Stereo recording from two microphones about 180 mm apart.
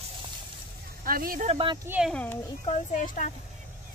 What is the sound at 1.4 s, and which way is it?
Speech, 30° right (ahead or behind).